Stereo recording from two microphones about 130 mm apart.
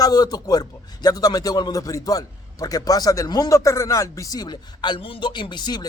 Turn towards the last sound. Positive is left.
turn(degrees=35)  # may be behind; listen again after turning